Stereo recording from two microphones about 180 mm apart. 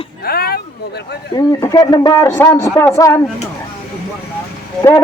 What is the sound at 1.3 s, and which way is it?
A man's voice, 20° left (ahead or behind).